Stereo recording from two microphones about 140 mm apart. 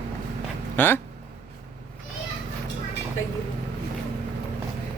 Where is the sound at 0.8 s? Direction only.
15° left (ahead or behind).